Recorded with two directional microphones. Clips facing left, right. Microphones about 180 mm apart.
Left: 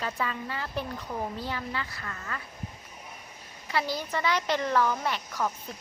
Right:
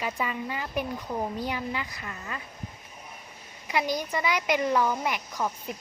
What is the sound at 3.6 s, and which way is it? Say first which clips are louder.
A woman's voice: right 2 dB; 15° right (ahead or behind).